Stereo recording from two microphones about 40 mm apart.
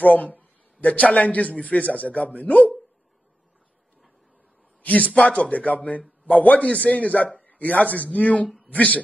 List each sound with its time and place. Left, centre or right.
0.0 s a man's voice: left
4.8 s a man's voice: left